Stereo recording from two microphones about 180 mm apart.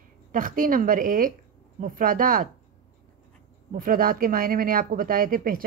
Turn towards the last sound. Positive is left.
turn(degrees=-50)  # may be behind; listen again after turning